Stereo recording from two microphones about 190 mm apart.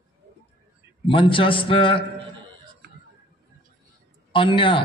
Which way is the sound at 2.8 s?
55° right (ahead or behind).